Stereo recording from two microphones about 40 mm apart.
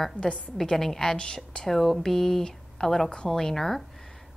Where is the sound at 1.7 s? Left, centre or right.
Centre.